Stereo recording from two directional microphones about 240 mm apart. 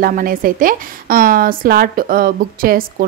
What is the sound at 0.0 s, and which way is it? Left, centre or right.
A woman's voice, right.